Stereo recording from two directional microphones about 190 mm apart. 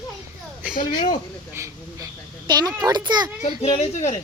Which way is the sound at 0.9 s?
25° left (ahead or behind).